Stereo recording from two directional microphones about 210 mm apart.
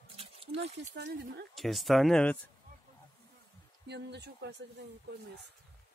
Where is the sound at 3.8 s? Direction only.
55° right (ahead or behind).